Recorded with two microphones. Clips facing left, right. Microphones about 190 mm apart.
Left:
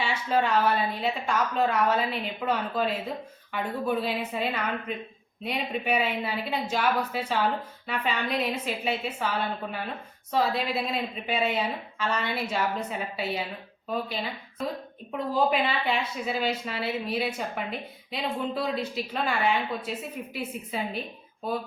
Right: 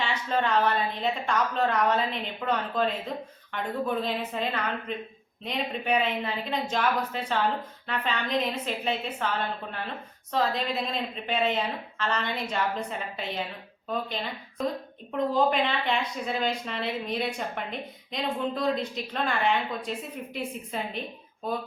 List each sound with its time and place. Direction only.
0.0 s a woman's voice: 10° left (ahead or behind)